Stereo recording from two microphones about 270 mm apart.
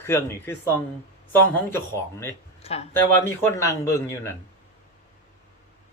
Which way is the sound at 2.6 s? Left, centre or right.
Left.